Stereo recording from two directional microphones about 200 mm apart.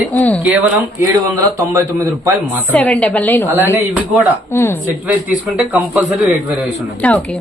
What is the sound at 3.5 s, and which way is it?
Speech, 10° right (ahead or behind).